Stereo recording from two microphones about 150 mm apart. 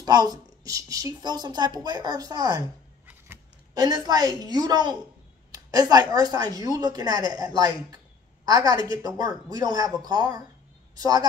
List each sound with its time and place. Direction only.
0.0 s speech: 25° right (ahead or behind)
3.7 s speech: 25° right (ahead or behind)